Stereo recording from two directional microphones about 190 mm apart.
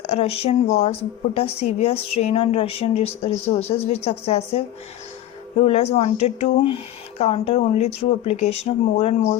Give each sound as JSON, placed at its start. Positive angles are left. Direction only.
{"t": 0.0, "sound": "a woman's voice", "side_deg": 30}